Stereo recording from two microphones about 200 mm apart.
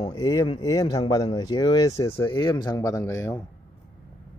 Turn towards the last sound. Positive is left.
turn(degrees=15)  # may be behind; listen again after turning